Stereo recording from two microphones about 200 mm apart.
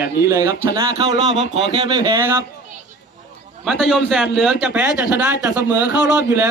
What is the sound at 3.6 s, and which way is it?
Speech, centre (ahead or behind).